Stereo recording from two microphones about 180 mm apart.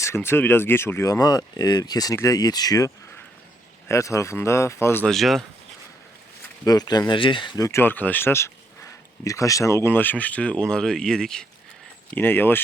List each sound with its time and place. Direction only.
0.0 s speech: 15° left (ahead or behind)
5.0 s speech: centre (ahead or behind)
6.7 s speech: 20° left (ahead or behind)